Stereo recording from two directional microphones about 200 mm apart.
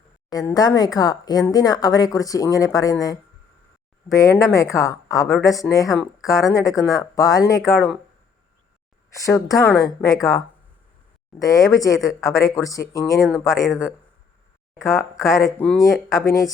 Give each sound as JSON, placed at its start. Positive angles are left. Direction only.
{"t": 0.3, "sound": "speech", "side_deg": 20}
{"t": 4.1, "sound": "speech", "side_deg": 15}
{"t": 9.1, "sound": "speech", "side_deg": 15}
{"t": 13.1, "sound": "a man's voice", "side_deg": 0}
{"t": 14.8, "sound": "speech", "side_deg": 15}